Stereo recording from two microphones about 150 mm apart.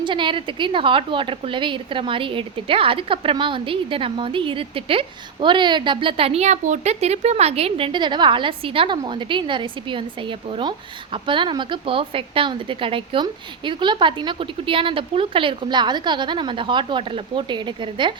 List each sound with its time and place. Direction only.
0.0 s a woman's voice: 35° right (ahead or behind)